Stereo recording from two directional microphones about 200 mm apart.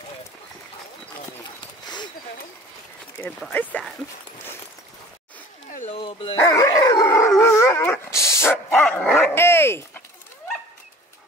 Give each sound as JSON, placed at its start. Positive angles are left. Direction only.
{"t": 3.3, "sound": "speech", "side_deg": 10}
{"t": 5.7, "sound": "a sound", "side_deg": 40}
{"t": 5.9, "sound": "dog", "side_deg": 25}
{"t": 6.3, "sound": "dog", "side_deg": 15}